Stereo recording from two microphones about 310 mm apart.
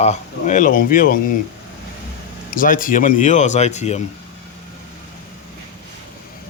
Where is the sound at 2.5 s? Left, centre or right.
Left.